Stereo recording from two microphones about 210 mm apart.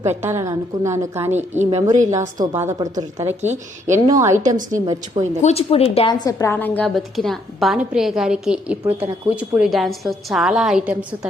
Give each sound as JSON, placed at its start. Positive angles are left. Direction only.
{"t": 0.2, "sound": "a woman's voice", "side_deg": -10}
{"t": 1.4, "sound": "a woman's voice", "side_deg": -35}
{"t": 2.4, "sound": "a woman's voice", "side_deg": -15}
{"t": 3.4, "sound": "a woman's voice", "side_deg": -35}
{"t": 4.0, "sound": "a woman's voice", "side_deg": -15}
{"t": 5.4, "sound": "a woman's voice", "side_deg": 30}